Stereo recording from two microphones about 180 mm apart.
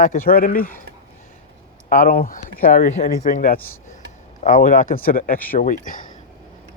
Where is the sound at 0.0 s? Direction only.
50° left (ahead or behind).